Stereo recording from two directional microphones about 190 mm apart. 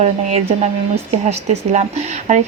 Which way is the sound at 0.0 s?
35° right (ahead or behind).